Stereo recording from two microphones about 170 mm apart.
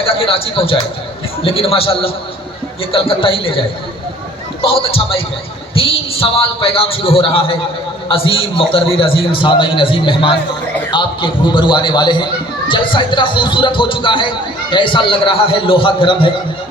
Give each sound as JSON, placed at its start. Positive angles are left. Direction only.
{"t": 0.0, "sound": "a man's voice", "side_deg": 30}